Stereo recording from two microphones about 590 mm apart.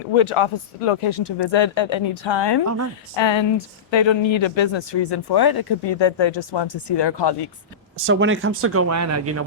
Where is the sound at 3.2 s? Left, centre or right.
Left.